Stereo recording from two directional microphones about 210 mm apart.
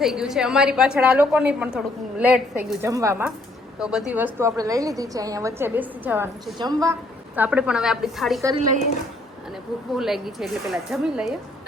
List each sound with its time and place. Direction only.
0.0 s a woman's voice: centre (ahead or behind)
2.8 s a woman's voice: 15° right (ahead or behind)
7.3 s a woman's voice: 5° right (ahead or behind)
10.0 s a woman's voice: centre (ahead or behind)